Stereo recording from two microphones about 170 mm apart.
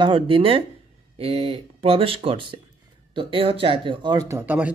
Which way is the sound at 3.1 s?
30° right (ahead or behind).